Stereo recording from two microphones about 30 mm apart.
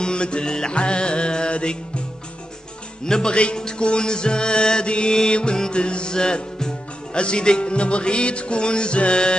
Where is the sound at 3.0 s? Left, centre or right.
Left.